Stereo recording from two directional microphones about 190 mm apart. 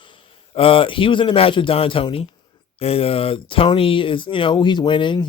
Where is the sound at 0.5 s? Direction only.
30° left (ahead or behind).